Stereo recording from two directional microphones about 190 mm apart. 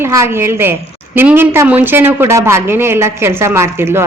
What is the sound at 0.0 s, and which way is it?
A woman's voice, 15° right (ahead or behind).